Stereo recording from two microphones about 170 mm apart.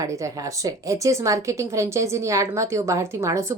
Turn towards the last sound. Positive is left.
turn(degrees=-20)  # may be behind; listen again after turning